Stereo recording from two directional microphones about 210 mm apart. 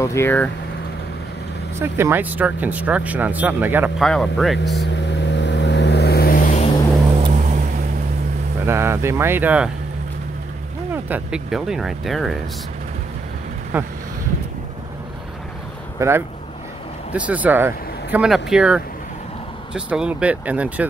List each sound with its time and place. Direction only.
0.0 s speech: 10° left (ahead or behind)
1.8 s speech: 10° right (ahead or behind)
5.3 s vehicle: 55° left (ahead or behind); by 6.7 s 35° left (ahead or behind)
7.2 s vehicle: 30° right (ahead or behind)
8.6 s speech: 10° right (ahead or behind)
11.1 s speech: 5° right (ahead or behind)
13.7 s speech: 10° right (ahead or behind)
16.0 s speech: 10° right (ahead or behind)